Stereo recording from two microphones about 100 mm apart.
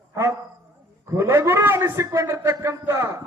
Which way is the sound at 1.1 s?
25° right (ahead or behind).